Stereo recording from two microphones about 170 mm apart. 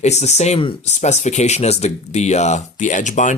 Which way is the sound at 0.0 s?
40° left (ahead or behind).